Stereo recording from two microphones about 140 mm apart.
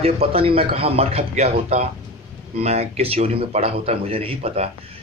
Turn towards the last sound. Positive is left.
turn(degrees=-45)  # may be behind; listen again after turning